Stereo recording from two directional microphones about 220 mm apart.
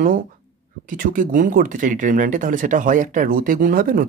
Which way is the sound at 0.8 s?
40° right (ahead or behind).